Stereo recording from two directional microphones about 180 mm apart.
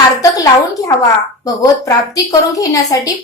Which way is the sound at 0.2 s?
20° left (ahead or behind).